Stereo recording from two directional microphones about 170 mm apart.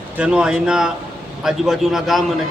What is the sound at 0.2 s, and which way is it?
A man's voice, 5° right (ahead or behind).